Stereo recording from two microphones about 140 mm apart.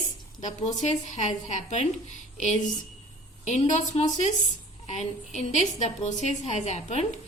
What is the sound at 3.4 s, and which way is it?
A woman's voice, 55° left (ahead or behind).